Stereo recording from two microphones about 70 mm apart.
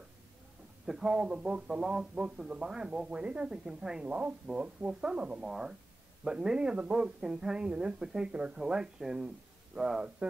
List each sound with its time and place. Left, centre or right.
0.8 s speech: centre